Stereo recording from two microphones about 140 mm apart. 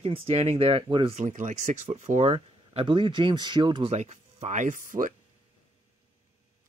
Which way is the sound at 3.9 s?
50° right (ahead or behind).